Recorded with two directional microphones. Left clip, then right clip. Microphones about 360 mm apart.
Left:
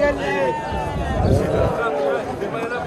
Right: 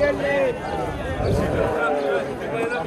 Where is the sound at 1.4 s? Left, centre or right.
Left.